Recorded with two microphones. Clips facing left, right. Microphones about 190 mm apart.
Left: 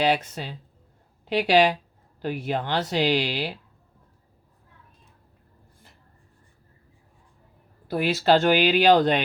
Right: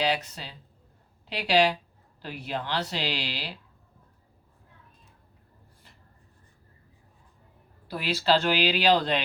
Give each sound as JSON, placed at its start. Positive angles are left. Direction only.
{"t": 0.0, "sound": "speech", "side_deg": 55}
{"t": 7.9, "sound": "speech", "side_deg": 50}